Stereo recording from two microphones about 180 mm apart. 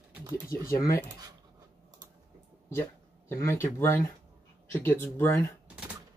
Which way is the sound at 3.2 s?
15° left (ahead or behind).